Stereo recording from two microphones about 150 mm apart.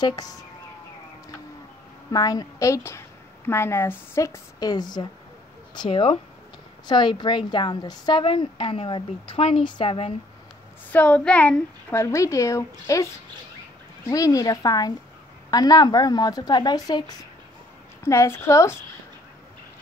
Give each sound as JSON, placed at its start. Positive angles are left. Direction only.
{"t": 0.0, "sound": "a woman's voice", "side_deg": 25}
{"t": 2.1, "sound": "a woman's voice", "side_deg": 25}
{"t": 10.9, "sound": "a woman's voice", "side_deg": 10}